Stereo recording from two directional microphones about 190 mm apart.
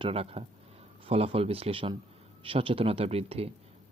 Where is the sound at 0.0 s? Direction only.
30° right (ahead or behind).